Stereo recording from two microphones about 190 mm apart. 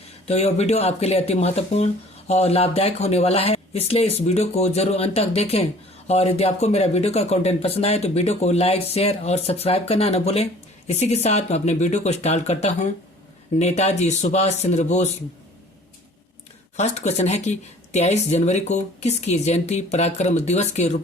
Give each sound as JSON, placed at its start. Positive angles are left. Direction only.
{"t": 0.3, "sound": "speech", "side_deg": 35}
{"t": 16.7, "sound": "speech", "side_deg": 35}